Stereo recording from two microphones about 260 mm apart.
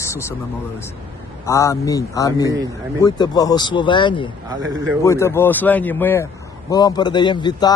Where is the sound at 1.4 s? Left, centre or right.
Centre.